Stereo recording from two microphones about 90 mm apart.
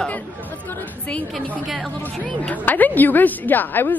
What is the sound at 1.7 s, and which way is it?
Speech, centre (ahead or behind).